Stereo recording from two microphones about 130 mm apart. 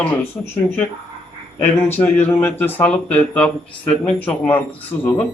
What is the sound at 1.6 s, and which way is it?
A man's voice, 15° left (ahead or behind).